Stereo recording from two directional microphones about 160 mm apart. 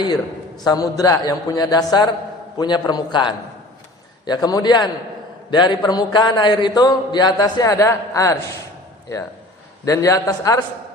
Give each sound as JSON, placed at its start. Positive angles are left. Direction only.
{"t": 0.0, "sound": "a man's voice", "side_deg": 25}
{"t": 9.8, "sound": "a man's voice", "side_deg": 20}